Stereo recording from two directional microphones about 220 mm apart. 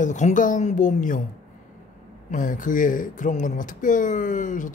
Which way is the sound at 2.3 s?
35° left (ahead or behind).